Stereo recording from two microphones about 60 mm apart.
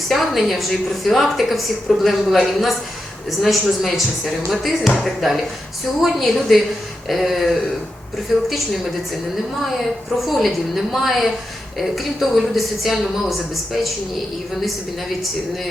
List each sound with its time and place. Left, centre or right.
0.1 s a woman's voice: centre
10.2 s a woman's voice: centre